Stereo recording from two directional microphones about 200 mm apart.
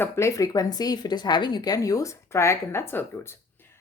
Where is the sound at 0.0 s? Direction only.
15° left (ahead or behind).